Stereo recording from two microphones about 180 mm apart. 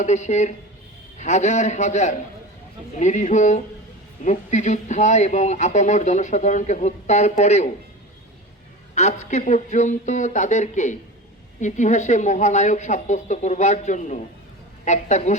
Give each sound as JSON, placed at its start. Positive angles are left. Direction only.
{"t": 0.0, "sound": "speech", "side_deg": 40}
{"t": 9.0, "sound": "speech", "side_deg": 40}